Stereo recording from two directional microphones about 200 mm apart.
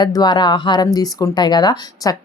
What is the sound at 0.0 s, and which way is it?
A woman's voice, 20° left (ahead or behind).